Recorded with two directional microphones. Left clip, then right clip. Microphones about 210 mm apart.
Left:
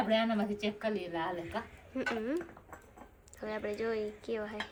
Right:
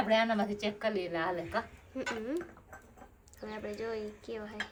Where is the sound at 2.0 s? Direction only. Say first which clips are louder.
Left 2 dB; 5° right (ahead or behind).